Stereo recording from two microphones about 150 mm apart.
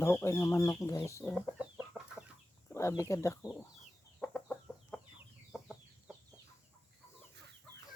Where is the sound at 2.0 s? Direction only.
10° right (ahead or behind).